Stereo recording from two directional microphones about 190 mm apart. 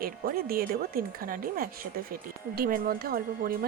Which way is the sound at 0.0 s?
50° right (ahead or behind).